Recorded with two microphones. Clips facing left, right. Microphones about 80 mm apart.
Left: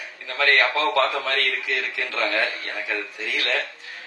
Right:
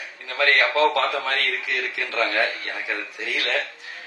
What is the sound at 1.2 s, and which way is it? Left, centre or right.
A man's voice, right.